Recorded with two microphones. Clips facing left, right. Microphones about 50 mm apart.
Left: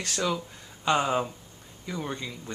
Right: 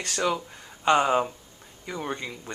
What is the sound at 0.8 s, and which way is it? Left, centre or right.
Speech, centre.